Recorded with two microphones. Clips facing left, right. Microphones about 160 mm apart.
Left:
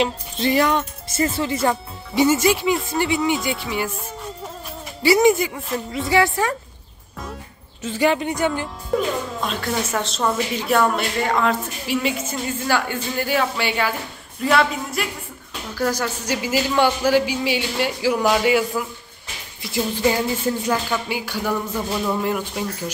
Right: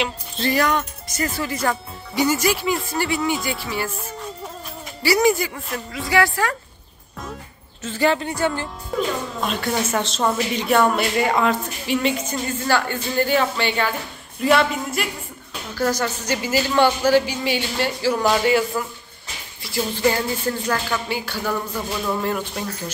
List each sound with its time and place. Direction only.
0.4 s speech: 20° left (ahead or behind)
5.0 s speech: 20° left (ahead or behind)
7.8 s speech: 15° left (ahead or behind)
9.4 s a woman's voice: centre (ahead or behind)
11.2 s speech: 10° right (ahead or behind)
11.9 s a woman's voice: 5° left (ahead or behind)